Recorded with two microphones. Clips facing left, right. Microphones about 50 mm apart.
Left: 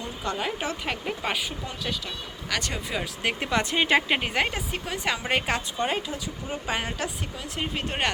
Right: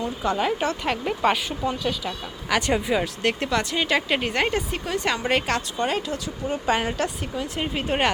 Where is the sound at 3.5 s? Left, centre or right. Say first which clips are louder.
Left 5 dB; left.